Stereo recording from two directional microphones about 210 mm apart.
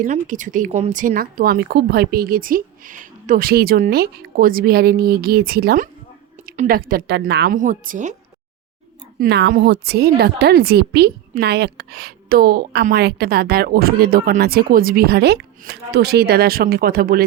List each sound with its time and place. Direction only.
0.0 s a woman's voice: 40° right (ahead or behind)
9.1 s a woman's voice: 50° right (ahead or behind)